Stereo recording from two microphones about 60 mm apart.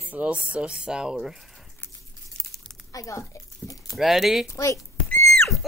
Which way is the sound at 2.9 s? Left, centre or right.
Left.